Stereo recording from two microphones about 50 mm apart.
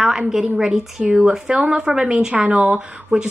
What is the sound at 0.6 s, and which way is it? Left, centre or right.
A woman's voice, centre.